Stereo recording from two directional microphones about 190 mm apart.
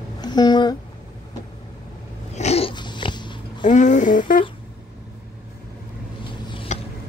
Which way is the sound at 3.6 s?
40° left (ahead or behind).